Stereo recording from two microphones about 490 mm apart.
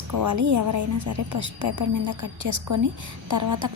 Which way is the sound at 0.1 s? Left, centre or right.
Right.